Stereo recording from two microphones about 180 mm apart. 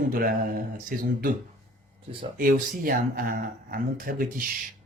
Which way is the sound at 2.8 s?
50° right (ahead or behind).